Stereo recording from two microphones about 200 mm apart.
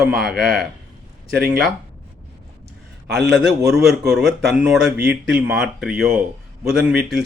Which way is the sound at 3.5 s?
5° right (ahead or behind).